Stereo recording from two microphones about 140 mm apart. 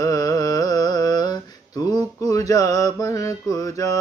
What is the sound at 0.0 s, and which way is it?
Carnatic music, 25° left (ahead or behind).